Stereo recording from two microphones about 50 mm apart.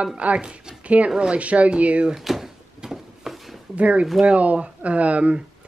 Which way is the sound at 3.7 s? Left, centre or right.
Right.